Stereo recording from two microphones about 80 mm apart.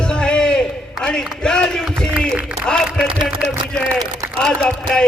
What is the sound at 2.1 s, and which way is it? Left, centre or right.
Speech, centre.